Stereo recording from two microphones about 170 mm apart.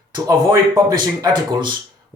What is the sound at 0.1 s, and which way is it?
Speech, 20° right (ahead or behind).